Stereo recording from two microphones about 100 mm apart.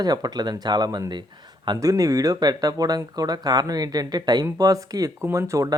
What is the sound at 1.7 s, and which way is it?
Speech, 35° right (ahead or behind).